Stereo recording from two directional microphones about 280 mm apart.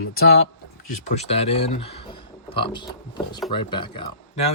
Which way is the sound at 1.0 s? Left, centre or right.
Left.